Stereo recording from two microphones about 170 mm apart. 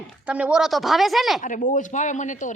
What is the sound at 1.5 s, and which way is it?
A man's voice, 50° left (ahead or behind).